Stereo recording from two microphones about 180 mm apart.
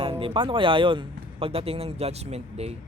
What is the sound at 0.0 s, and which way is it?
Speech, 30° right (ahead or behind).